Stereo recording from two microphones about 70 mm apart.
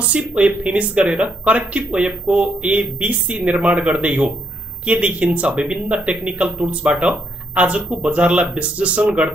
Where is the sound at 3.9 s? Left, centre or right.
Centre.